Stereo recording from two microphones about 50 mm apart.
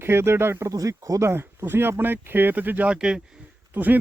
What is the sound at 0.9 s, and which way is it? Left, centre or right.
Speech, right.